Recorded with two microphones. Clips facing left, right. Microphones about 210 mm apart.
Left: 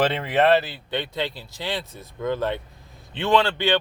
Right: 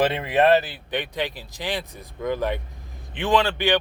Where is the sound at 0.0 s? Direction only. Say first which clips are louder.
Right 1 dB; 10° right (ahead or behind).